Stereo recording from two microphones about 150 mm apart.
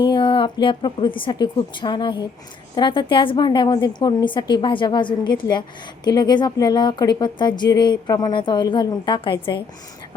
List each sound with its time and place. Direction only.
0.1 s a woman's voice: 35° left (ahead or behind)